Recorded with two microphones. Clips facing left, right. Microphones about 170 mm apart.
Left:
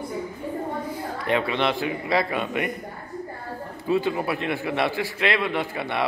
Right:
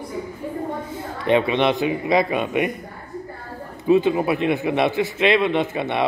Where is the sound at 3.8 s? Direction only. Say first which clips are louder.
Right 6 dB; 20° right (ahead or behind).